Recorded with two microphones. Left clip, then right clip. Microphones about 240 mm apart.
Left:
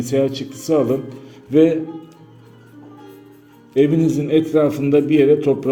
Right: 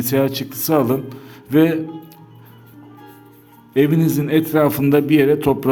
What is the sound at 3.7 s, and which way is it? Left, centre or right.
A man's voice, right.